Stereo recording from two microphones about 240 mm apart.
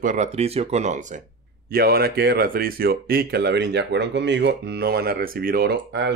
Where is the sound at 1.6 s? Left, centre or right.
Right.